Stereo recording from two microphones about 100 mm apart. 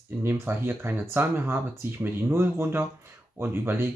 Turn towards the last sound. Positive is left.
turn(degrees=-25)  # may be behind; listen again after turning